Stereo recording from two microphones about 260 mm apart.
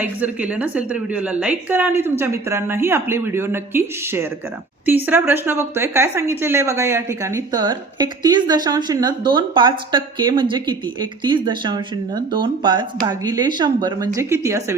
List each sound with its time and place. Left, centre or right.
0.0 s speech: centre